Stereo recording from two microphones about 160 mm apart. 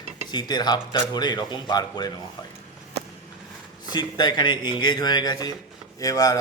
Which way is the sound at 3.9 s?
25° left (ahead or behind).